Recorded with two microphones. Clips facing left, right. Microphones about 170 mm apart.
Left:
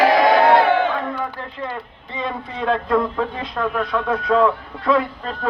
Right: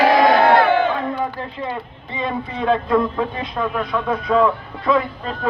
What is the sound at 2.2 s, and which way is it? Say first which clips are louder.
Speech: right 2 dB; 5° right (ahead or behind).